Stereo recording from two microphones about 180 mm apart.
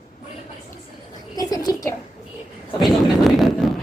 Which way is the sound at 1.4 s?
20° left (ahead or behind).